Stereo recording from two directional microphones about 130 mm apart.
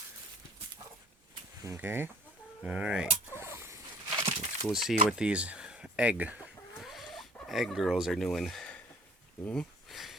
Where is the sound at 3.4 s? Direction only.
20° right (ahead or behind).